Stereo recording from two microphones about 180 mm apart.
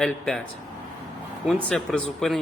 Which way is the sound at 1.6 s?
5° left (ahead or behind).